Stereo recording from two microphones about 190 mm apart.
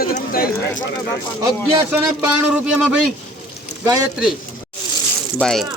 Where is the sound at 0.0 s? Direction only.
50° left (ahead or behind).